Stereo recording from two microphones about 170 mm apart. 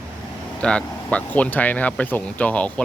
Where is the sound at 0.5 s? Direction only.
5° left (ahead or behind).